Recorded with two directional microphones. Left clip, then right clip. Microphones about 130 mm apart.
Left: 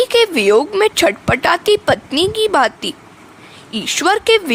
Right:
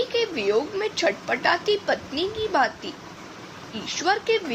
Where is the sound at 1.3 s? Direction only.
90° left.